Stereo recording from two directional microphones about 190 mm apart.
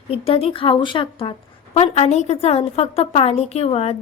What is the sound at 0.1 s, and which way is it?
A woman's voice, 30° left (ahead or behind).